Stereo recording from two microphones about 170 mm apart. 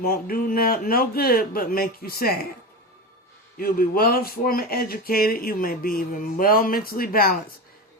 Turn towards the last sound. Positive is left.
turn(degrees=60)  # may be behind; listen again after turning